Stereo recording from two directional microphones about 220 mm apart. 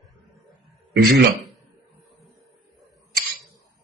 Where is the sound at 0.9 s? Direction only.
50° right (ahead or behind).